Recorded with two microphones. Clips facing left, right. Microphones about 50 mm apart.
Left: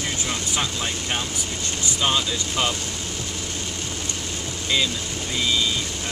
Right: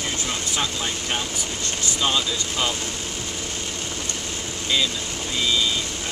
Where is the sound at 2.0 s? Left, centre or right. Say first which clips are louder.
Left 1 dB; centre.